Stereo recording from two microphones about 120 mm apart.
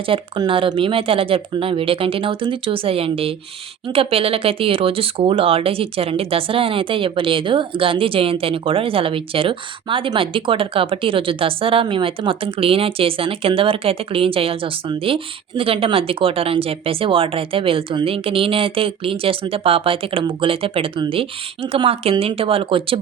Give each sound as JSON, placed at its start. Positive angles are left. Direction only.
{"t": 0.0, "sound": "speech", "side_deg": -45}